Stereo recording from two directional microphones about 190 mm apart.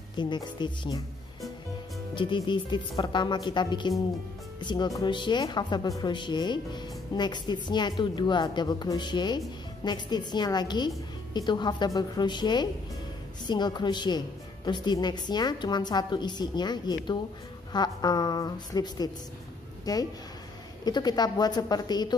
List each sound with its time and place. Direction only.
0.2 s a woman's voice: 25° left (ahead or behind)
2.1 s a woman's voice: 25° left (ahead or behind)